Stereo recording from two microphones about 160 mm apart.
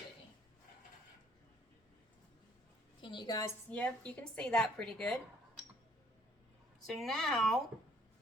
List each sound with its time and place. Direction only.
3.0 s a sound: 30° left (ahead or behind)
3.7 s a woman's voice: 10° left (ahead or behind)
6.8 s a woman's voice: centre (ahead or behind)